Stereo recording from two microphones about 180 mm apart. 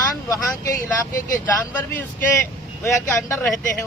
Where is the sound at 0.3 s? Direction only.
20° left (ahead or behind).